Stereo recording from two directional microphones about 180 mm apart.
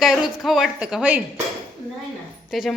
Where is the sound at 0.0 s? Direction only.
Centre (ahead or behind).